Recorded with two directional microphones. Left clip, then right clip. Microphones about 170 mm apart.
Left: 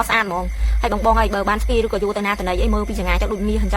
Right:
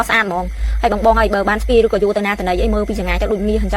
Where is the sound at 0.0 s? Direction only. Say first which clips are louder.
Right 3 dB; 20° right (ahead or behind).